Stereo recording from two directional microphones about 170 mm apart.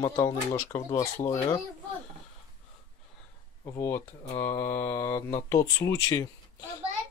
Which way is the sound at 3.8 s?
15° left (ahead or behind).